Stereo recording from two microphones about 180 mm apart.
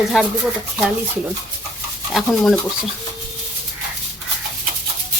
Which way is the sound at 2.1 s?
Centre (ahead or behind).